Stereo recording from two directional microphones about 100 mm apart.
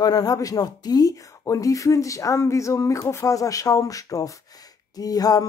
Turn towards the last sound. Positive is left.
turn(degrees=40)  # may be behind; listen again after turning